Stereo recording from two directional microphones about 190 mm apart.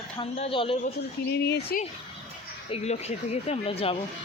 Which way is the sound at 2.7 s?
35° left (ahead or behind).